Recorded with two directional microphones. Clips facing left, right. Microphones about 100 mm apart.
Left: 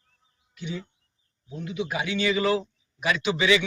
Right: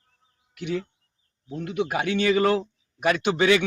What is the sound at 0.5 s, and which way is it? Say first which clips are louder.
A man's voice: right 6 dB; 65° right (ahead or behind).